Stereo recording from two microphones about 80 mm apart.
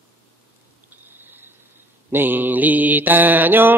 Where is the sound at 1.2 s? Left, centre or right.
Right.